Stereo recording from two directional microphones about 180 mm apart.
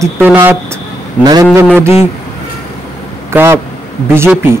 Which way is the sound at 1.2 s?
20° right (ahead or behind).